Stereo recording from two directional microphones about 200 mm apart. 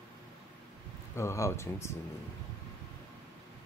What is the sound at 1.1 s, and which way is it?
Speech, 15° left (ahead or behind).